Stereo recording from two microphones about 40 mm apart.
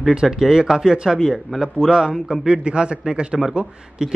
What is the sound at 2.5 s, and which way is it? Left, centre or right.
A man's voice, right.